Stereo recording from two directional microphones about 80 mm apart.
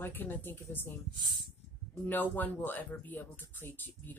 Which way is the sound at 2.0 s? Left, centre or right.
Left.